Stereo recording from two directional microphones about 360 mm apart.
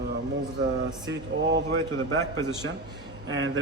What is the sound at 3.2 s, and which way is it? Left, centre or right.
Speech, right.